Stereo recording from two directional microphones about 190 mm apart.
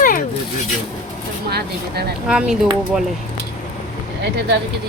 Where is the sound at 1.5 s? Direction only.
55° right (ahead or behind).